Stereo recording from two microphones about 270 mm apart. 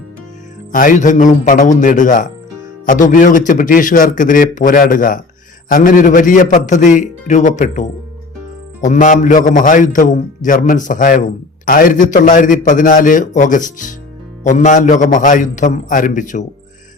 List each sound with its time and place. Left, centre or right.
0.7 s a man's voice: left